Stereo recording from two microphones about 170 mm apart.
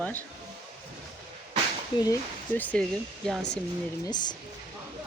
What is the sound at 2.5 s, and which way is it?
Speech, 10° left (ahead or behind).